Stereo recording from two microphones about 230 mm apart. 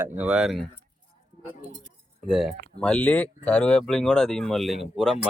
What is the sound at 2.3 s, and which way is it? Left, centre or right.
Speech, centre.